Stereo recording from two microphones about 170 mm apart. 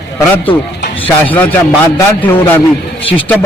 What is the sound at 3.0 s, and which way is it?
Speech, 30° left (ahead or behind).